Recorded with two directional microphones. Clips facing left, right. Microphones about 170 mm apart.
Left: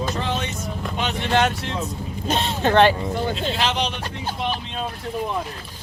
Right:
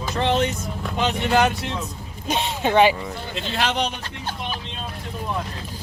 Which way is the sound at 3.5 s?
55° right (ahead or behind).